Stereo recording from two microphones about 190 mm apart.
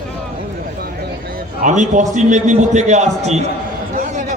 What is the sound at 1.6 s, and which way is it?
A man's voice, 40° right (ahead or behind).